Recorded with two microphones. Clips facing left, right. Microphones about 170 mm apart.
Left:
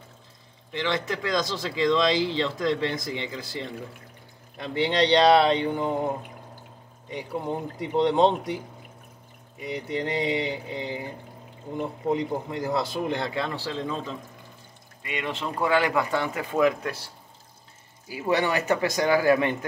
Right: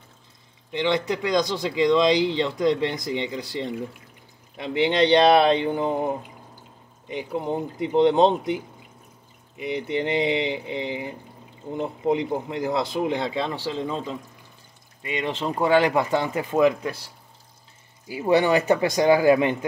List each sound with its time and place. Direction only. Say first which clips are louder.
0.7 s speech: right 4 dB; 20° right (ahead or behind)
9.6 s speech: right 4 dB; 20° right (ahead or behind)
18.0 s speech: right 5 dB; 20° right (ahead or behind)